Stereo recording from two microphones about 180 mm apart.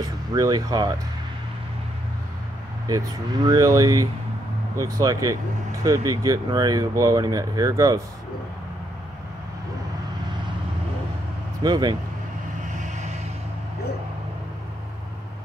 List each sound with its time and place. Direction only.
0.3 s speech: 20° right (ahead or behind)
2.9 s speech: 20° right (ahead or behind)
11.6 s speech: 20° right (ahead or behind)
12.7 s vehicle: 40° right (ahead or behind)